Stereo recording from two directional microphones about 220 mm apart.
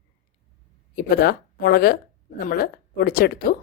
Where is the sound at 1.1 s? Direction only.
45° left (ahead or behind).